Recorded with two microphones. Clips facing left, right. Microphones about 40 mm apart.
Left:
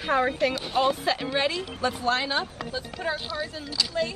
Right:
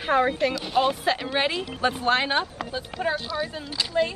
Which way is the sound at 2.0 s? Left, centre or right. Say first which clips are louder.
Right 3 dB; right.